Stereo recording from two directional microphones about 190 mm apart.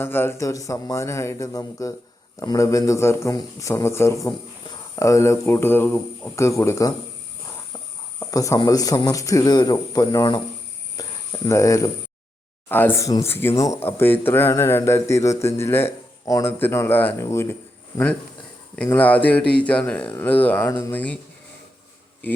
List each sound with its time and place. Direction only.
0.0 s a man's voice: 10° left (ahead or behind)
8.2 s speech: 15° left (ahead or behind)
10.9 s cricket: 20° left (ahead or behind)
12.6 s a man's voice: 10° left (ahead or behind)